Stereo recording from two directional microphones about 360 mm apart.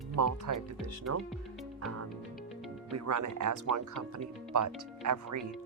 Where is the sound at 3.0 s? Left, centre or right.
Right.